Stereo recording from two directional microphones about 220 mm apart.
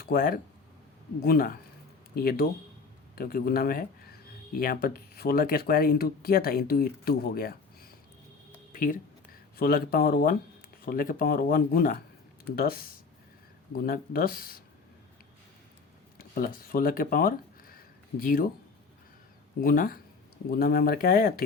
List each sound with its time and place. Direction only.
0.0 s speech: 45° left (ahead or behind)
8.7 s a sound: 40° left (ahead or behind)
9.6 s speech: 45° left (ahead or behind)
16.1 s speech: 40° left (ahead or behind)
19.6 s speech: 40° left (ahead or behind)